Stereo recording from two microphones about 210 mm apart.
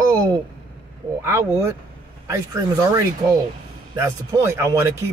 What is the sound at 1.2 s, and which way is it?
A man's voice, 15° right (ahead or behind).